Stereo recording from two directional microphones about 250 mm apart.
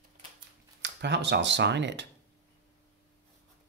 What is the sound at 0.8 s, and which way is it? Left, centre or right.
Speech, right.